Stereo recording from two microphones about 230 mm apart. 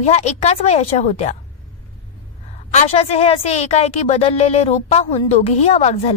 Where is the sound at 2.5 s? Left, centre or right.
Left.